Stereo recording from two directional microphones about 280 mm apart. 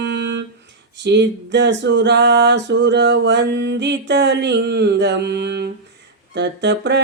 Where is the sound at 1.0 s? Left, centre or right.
Right.